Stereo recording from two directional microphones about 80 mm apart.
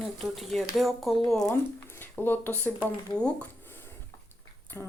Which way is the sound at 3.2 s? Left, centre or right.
Centre.